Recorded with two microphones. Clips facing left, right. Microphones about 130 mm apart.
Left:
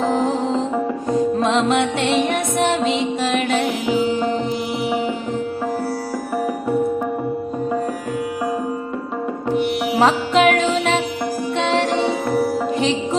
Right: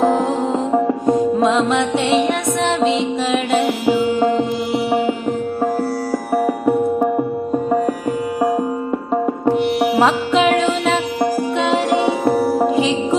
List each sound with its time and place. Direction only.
0.0 s music: 5° right (ahead or behind)
2.0 s music: centre (ahead or behind)
9.9 s music: centre (ahead or behind)
12.3 s music: 40° right (ahead or behind)